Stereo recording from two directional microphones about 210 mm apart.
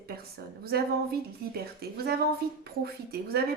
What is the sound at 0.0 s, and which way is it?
A woman's voice, 45° right (ahead or behind).